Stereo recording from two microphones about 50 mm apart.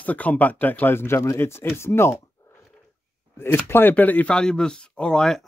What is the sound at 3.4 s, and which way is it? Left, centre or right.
Speech, left.